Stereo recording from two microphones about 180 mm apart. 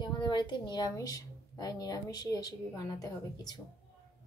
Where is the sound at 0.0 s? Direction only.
25° left (ahead or behind).